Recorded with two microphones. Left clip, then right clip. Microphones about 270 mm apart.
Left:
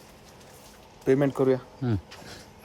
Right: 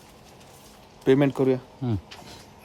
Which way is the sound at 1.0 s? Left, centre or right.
Right.